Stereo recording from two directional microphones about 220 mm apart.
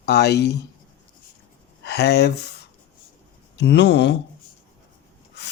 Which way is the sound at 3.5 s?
50° left (ahead or behind).